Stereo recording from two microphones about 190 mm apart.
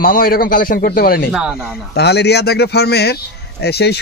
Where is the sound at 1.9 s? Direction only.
60° left (ahead or behind).